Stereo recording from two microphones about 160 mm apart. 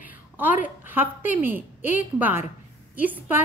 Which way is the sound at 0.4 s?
10° right (ahead or behind).